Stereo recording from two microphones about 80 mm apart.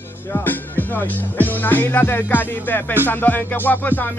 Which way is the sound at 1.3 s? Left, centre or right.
Left.